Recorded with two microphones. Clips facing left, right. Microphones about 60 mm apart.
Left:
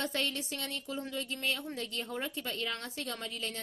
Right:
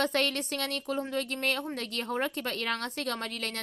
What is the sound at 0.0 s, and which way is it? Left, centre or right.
Speech, right.